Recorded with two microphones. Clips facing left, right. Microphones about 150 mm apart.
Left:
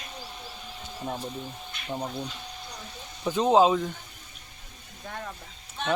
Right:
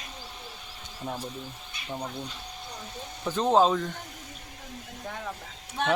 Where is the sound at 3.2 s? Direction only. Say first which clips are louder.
Left 2 dB; 10° left (ahead or behind).